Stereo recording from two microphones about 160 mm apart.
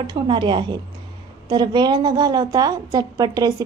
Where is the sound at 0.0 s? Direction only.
30° right (ahead or behind).